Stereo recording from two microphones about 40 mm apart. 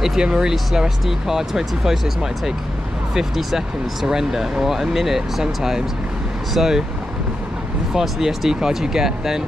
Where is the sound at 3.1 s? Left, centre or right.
Centre.